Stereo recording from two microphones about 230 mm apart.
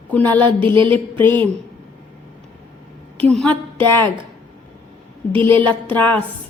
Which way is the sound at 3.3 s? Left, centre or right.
Centre.